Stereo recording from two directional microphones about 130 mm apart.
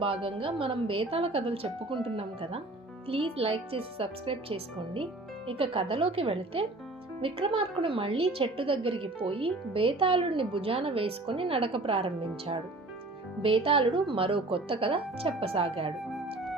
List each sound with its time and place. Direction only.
0.0 s a woman's voice: 45° right (ahead or behind)